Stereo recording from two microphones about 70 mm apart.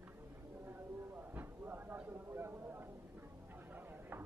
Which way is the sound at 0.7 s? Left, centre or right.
Right.